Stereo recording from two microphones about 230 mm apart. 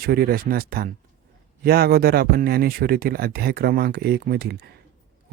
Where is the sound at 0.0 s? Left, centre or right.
Right.